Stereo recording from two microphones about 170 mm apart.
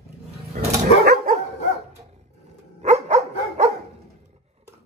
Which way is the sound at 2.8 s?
40° right (ahead or behind).